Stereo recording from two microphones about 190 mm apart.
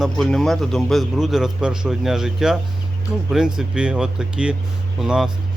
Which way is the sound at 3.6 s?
5° right (ahead or behind).